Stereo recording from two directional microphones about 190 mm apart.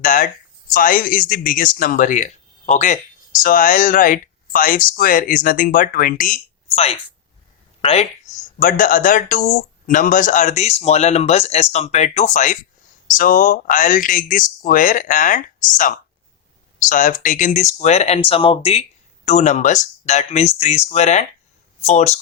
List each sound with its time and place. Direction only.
0.0 s a sound: 45° left (ahead or behind)
0.7 s speech: 45° left (ahead or behind)
6.7 s a woman's voice: 35° left (ahead or behind)